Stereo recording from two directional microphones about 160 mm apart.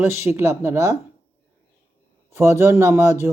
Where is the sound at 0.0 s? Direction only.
15° right (ahead or behind).